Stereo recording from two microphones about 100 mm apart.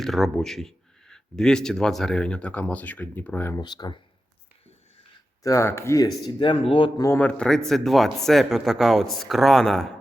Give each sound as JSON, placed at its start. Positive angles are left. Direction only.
{"t": 0.0, "sound": "speech", "side_deg": 0}
{"t": 3.6, "sound": "speech", "side_deg": 45}
{"t": 5.4, "sound": "speech", "side_deg": 35}
{"t": 6.4, "sound": "speech", "side_deg": 60}
{"t": 7.2, "sound": "speech", "side_deg": 10}